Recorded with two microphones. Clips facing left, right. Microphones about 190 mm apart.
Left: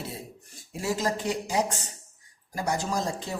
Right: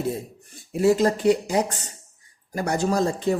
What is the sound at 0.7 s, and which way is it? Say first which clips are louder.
A man's voice: right 10 dB; 60° right (ahead or behind).